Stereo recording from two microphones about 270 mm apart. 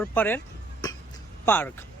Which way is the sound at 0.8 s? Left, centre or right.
Centre.